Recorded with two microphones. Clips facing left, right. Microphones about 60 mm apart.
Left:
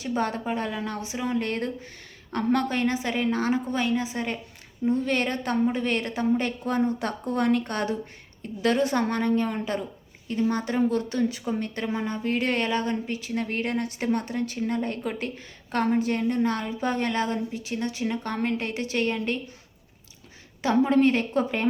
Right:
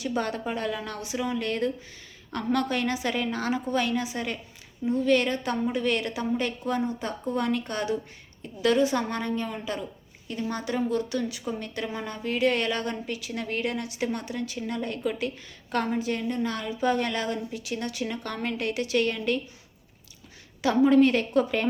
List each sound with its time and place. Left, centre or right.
0.0 s a woman's voice: left
11.9 s a woman's voice: left
12.2 s a woman's voice: left
12.6 s a woman's voice: left
20.6 s a woman's voice: left